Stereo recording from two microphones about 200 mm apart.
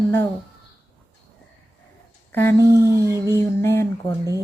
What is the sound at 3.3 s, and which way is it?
Speech, 15° left (ahead or behind).